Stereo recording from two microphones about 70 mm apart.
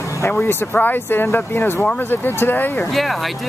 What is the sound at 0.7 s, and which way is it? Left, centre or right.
Speech, left.